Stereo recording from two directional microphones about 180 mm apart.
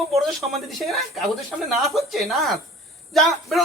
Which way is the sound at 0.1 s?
Centre (ahead or behind).